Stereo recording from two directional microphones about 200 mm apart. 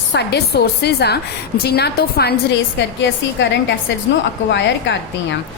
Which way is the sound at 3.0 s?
65° left (ahead or behind).